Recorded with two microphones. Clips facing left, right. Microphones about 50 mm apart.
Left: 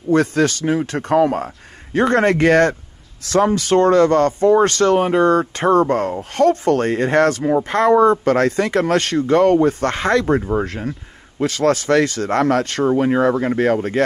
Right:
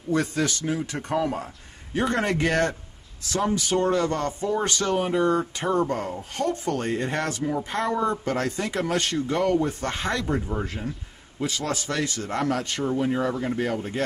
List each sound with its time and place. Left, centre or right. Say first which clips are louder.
0.1 s speech: left 9 dB; left
10.2 s speech: left 9 dB; left
12.8 s speech: left 9 dB; left